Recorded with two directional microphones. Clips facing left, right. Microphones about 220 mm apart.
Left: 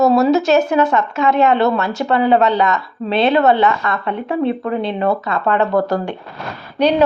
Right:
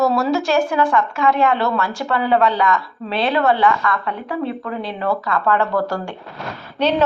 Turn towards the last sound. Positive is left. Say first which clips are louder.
# left 4 dB
turn(degrees=15)  # may be behind; listen again after turning